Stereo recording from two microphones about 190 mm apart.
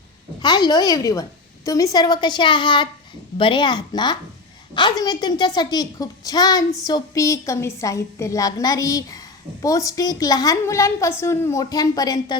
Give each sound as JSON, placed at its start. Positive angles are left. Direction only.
{"t": 0.4, "sound": "a woman's voice", "side_deg": 20}